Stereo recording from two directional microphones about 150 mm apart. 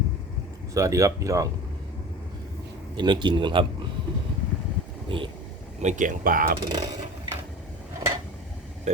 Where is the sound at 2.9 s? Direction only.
30° right (ahead or behind).